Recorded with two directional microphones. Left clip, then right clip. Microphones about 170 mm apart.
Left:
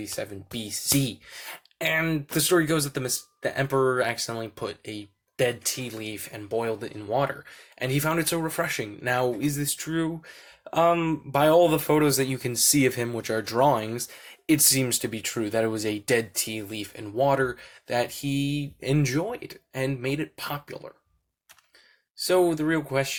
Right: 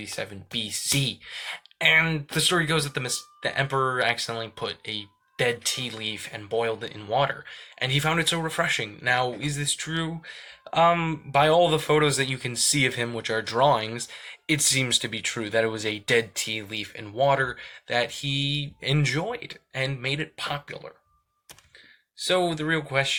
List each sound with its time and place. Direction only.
0.1 s speech: 50° left (ahead or behind)
22.4 s speech: 45° left (ahead or behind)